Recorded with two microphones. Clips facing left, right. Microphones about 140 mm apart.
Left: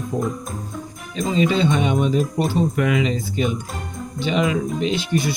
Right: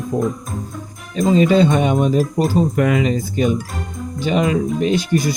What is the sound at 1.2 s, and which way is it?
Speech, 45° right (ahead or behind).